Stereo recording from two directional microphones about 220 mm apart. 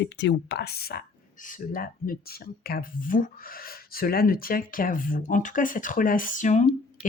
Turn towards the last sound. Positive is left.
turn(degrees=35)  # may be behind; listen again after turning